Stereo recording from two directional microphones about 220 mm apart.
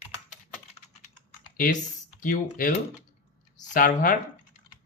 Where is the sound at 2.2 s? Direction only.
40° left (ahead or behind).